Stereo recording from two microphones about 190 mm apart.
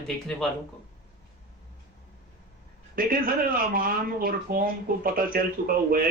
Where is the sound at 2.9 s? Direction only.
50° right (ahead or behind).